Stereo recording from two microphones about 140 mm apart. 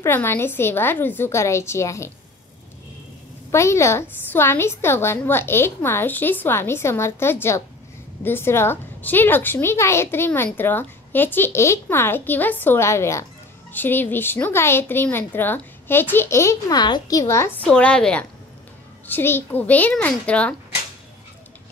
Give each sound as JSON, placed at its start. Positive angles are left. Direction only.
{"t": 0.0, "sound": "a woman's voice", "side_deg": 15}
{"t": 3.5, "sound": "a woman's voice", "side_deg": 20}
{"t": 17.6, "sound": "a woman's voice", "side_deg": 5}